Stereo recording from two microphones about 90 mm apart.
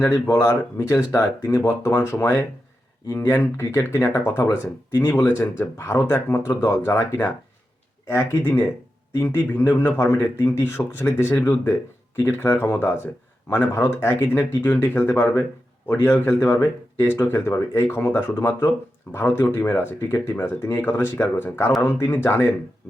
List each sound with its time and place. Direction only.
0.0 s speech: 30° left (ahead or behind)